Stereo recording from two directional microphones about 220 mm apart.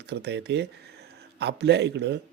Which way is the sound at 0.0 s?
50° right (ahead or behind).